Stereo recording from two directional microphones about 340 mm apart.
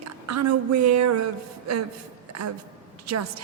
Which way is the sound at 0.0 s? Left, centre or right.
Right.